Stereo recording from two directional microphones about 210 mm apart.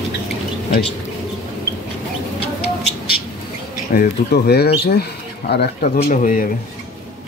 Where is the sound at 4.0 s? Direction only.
50° left (ahead or behind).